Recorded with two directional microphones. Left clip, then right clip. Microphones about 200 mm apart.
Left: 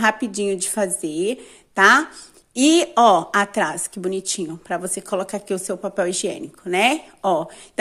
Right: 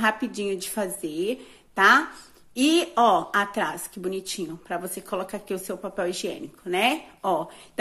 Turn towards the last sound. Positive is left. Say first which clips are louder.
# left 5 dB
turn(degrees=30)  # may be behind; listen again after turning